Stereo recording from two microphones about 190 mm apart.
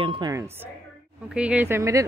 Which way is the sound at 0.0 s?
20° right (ahead or behind).